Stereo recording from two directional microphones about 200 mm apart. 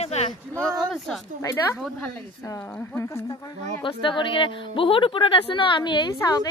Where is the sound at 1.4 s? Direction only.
15° left (ahead or behind).